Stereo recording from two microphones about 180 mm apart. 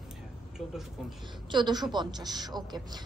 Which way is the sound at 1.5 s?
25° right (ahead or behind).